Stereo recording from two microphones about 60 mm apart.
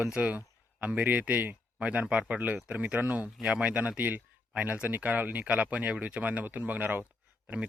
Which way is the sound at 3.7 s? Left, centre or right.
Right.